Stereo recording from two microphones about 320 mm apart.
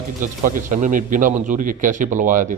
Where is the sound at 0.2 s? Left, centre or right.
Right.